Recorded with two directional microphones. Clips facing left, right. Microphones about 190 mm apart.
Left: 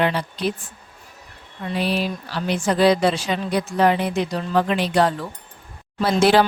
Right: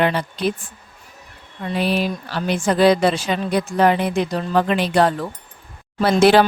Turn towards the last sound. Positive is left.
turn(degrees=-60)  # may be behind; listen again after turning